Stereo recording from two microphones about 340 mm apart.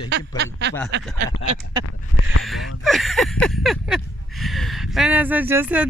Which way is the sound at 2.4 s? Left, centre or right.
Centre.